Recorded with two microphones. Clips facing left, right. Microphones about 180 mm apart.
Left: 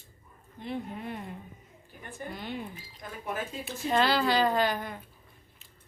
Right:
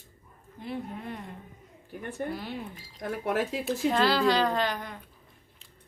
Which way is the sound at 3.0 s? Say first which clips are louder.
Right 7 dB; 75° right (ahead or behind).